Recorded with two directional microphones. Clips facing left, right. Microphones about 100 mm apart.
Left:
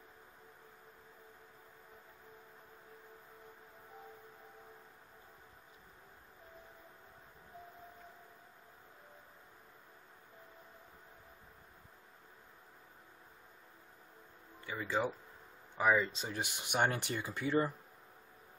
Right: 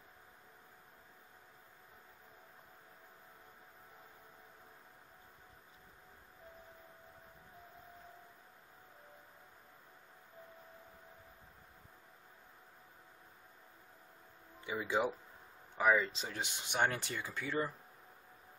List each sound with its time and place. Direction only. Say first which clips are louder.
14.7 s speech: right 1 dB; 15° right (ahead or behind)
15.8 s speech: even; centre (ahead or behind)
16.3 s speech: left 2 dB; 10° left (ahead or behind)